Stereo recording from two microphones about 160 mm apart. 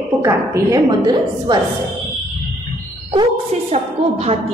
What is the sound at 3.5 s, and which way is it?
Speech, 40° right (ahead or behind).